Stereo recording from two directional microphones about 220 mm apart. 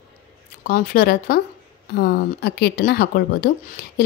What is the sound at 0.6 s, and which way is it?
Speech, 40° left (ahead or behind).